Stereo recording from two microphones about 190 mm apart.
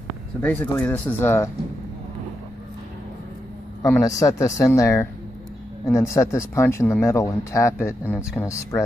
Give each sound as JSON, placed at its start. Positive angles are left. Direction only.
{"t": 0.4, "sound": "speech", "side_deg": 10}
{"t": 3.8, "sound": "speech", "side_deg": 15}